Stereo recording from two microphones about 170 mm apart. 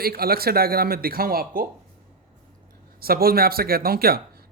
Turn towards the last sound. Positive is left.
turn(degrees=-60)  # may be behind; listen again after turning